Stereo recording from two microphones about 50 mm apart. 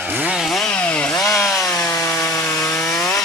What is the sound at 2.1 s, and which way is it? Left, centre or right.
Wood, left.